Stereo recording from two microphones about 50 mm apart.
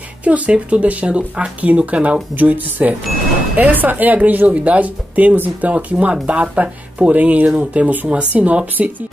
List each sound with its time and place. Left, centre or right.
0.2 s speech: right